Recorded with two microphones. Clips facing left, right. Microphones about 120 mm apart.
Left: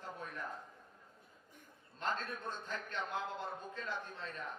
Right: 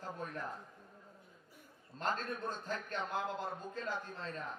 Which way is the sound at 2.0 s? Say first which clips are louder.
Right 2 dB; 40° right (ahead or behind).